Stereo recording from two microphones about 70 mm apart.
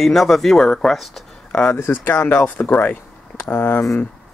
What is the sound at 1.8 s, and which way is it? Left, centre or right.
Speech, left.